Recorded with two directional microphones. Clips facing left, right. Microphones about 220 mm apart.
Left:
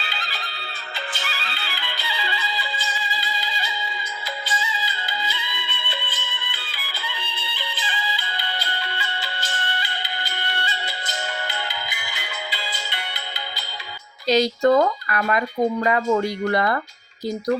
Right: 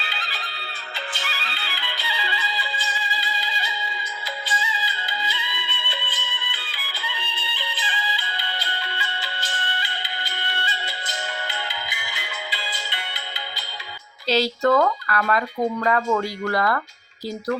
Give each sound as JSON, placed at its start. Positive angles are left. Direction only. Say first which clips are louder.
{"t": 0.1, "sound": "music", "louder": "left 1 dB", "side_deg": 40}
{"t": 14.3, "sound": "speech", "louder": "left 3 dB", "side_deg": 15}